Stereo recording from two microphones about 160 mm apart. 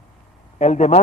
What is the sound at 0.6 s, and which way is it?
Speech, 45° left (ahead or behind).